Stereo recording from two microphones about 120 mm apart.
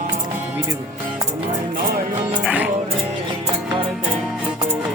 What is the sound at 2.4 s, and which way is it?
Music, 10° right (ahead or behind).